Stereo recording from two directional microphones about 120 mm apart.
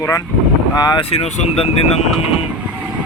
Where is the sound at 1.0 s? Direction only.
55° left (ahead or behind).